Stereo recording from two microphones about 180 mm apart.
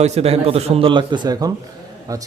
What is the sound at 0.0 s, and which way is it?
A man's voice, 35° right (ahead or behind).